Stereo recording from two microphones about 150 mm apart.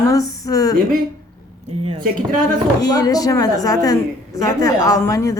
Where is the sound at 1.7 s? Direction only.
45° right (ahead or behind).